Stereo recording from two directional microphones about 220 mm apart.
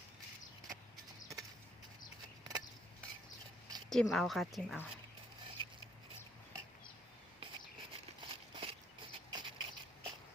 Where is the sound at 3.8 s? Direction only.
Centre (ahead or behind).